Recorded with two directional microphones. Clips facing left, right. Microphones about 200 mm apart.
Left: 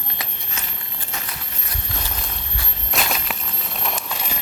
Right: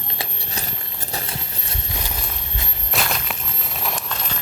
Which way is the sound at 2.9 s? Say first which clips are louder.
Even; centre (ahead or behind).